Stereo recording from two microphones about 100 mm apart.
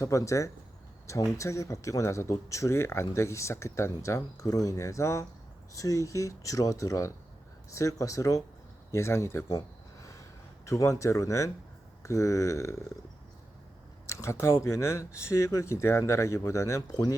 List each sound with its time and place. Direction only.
0.0 s speech: 30° left (ahead or behind)
10.7 s speech: 30° left (ahead or behind)
14.1 s a sound: 30° left (ahead or behind)
14.4 s speech: 30° left (ahead or behind)